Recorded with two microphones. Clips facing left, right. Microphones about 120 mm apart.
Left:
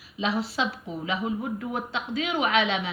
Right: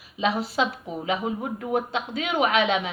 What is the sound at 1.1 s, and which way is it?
A man's voice, 55° right (ahead or behind).